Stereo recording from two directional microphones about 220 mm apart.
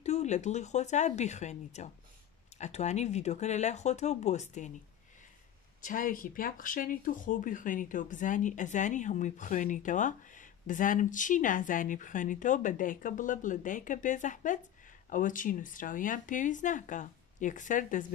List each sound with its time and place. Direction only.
0.0 s speech: 30° left (ahead or behind)
5.8 s speech: 40° left (ahead or behind)